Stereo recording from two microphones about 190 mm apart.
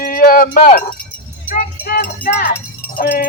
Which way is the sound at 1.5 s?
50° left (ahead or behind).